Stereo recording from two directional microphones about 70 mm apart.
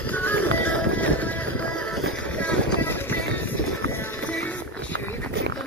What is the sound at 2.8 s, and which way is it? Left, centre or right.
Music, left.